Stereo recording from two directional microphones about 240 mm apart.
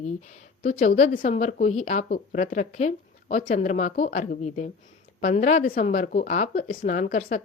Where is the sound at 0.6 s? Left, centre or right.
Left.